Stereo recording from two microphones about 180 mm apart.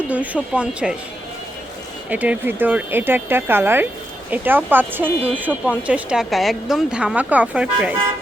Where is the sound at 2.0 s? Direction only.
10° right (ahead or behind).